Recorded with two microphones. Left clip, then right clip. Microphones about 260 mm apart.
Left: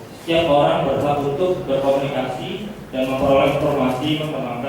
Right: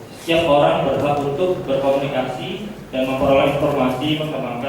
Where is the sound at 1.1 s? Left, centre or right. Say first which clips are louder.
Even; right.